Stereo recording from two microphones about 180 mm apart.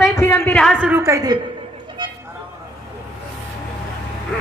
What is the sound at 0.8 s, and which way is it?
Speech, 10° right (ahead or behind).